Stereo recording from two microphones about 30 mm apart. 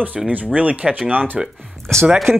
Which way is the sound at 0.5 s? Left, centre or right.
Right.